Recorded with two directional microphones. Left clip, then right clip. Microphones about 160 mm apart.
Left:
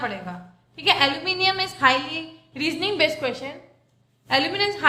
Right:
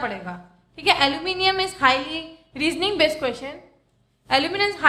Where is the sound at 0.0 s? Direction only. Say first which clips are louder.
Right 1 dB; 25° right (ahead or behind).